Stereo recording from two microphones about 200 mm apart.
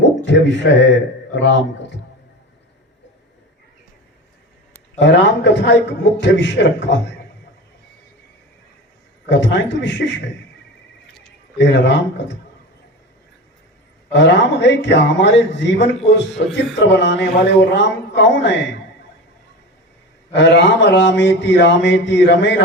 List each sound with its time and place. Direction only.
0.3 s mantra: 65° left (ahead or behind)
4.9 s mantra: 60° left (ahead or behind)
9.3 s mantra: 65° left (ahead or behind)
11.5 s mantra: 60° left (ahead or behind)
14.1 s mantra: 60° left (ahead or behind)
20.3 s mantra: 60° left (ahead or behind)